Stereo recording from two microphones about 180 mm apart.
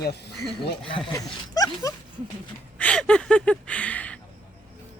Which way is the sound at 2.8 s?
5° left (ahead or behind).